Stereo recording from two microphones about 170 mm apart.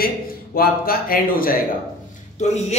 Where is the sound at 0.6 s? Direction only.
60° left (ahead or behind).